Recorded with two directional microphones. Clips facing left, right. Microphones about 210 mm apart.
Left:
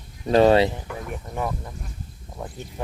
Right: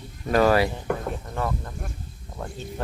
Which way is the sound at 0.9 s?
65° right (ahead or behind).